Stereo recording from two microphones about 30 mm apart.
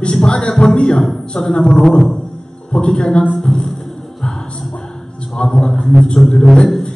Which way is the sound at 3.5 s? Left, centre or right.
Centre.